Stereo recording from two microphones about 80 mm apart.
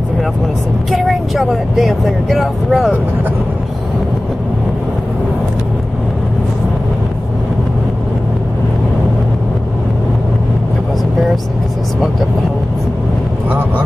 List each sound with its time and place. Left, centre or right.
0.9 s speech: centre
13.5 s speech: right